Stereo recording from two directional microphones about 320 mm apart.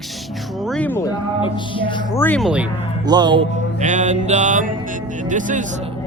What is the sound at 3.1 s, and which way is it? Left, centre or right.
Music, centre.